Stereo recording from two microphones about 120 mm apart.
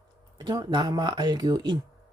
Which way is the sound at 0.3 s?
40° right (ahead or behind).